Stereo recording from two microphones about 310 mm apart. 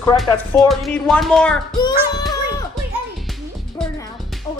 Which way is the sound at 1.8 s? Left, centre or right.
Centre.